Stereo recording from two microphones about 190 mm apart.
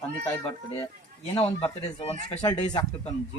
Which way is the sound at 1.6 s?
30° left (ahead or behind).